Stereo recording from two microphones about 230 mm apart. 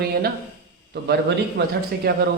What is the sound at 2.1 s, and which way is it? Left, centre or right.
Speech, right.